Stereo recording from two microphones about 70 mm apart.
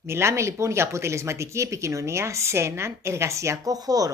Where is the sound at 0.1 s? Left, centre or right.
Right.